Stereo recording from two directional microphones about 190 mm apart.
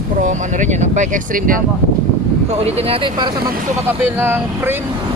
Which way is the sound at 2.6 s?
30° right (ahead or behind).